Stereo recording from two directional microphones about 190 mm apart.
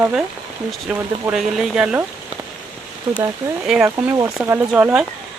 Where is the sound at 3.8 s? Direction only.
15° right (ahead or behind).